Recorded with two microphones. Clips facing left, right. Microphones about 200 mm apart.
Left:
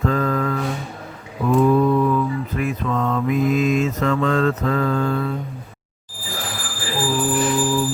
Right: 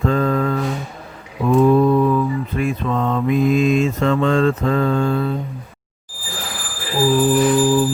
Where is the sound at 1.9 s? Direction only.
30° right (ahead or behind).